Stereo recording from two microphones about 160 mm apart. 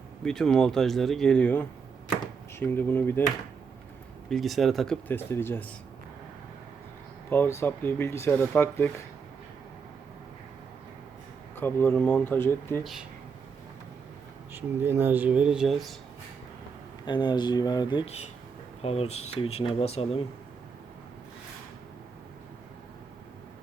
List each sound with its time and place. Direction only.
0.3 s speech: 5° left (ahead or behind)
4.3 s speech: centre (ahead or behind)
5.0 s speech: 15° left (ahead or behind)
7.3 s speech: 15° left (ahead or behind)
11.5 s speech: 15° left (ahead or behind)
14.8 s speech: 15° right (ahead or behind)
17.1 s speech: 30° left (ahead or behind)
18.8 s speech: 40° left (ahead or behind)